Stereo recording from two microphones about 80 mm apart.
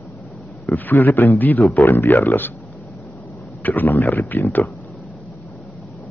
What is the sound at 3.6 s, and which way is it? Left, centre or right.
Speech, left.